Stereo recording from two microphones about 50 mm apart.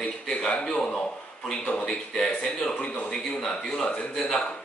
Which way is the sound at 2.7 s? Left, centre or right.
Left.